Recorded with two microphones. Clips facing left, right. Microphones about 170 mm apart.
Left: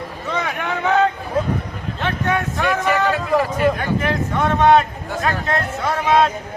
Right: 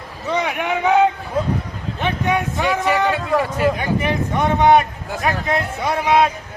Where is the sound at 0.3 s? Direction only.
15° right (ahead or behind).